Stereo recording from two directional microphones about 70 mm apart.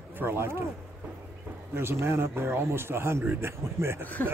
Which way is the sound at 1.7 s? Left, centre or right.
Right.